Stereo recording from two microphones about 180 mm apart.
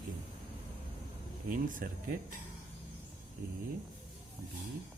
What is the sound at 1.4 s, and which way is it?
Speech, 50° right (ahead or behind).